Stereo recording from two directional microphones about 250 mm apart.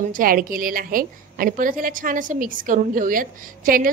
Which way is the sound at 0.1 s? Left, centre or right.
Right.